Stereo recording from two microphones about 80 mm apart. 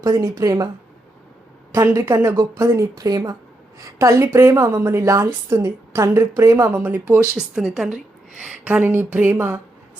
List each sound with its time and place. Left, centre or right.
0.0 s a woman's voice: right
1.7 s a woman's voice: right
3.8 s a woman's voice: right
5.6 s a woman's voice: right
6.7 s a sound: right
7.3 s a woman's voice: centre
8.6 s a sound: right